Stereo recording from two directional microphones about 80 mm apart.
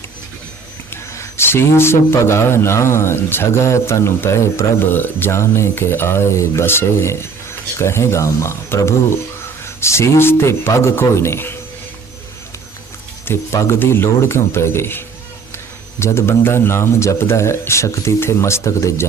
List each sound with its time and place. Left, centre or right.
0.9 s speech: left
13.2 s speech: left